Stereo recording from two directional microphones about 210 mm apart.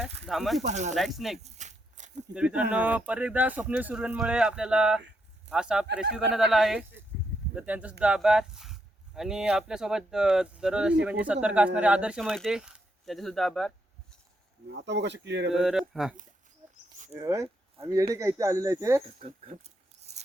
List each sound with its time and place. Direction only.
0.0 s a sound: centre (ahead or behind)
0.7 s speech: 35° right (ahead or behind)
0.9 s speech: centre (ahead or behind)
1.5 s a sound: 35° right (ahead or behind)
2.3 s speech: 5° right (ahead or behind)
14.7 s speech: 55° right (ahead or behind)
15.5 s speech: centre (ahead or behind)
17.1 s speech: 15° right (ahead or behind)
19.2 s a sound: 30° right (ahead or behind)